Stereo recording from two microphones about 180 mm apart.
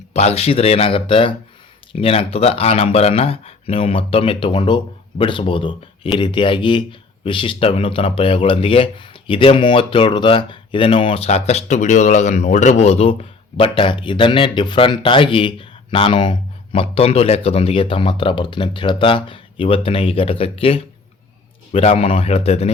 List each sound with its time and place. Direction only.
0.1 s speech: 35° left (ahead or behind)